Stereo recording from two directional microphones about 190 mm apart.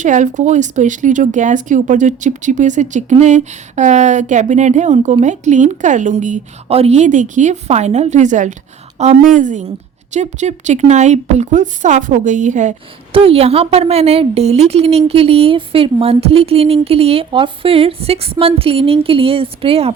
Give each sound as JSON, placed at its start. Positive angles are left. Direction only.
{"t": 0.0, "sound": "speech", "side_deg": -40}